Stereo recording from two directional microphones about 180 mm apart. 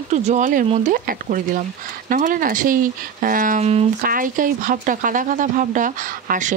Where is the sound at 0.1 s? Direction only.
40° right (ahead or behind).